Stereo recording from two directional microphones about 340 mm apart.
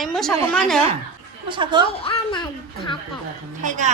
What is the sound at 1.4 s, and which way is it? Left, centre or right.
Speech, centre.